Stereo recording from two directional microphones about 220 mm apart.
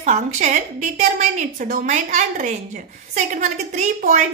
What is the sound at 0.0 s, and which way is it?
A woman's voice, 30° right (ahead or behind).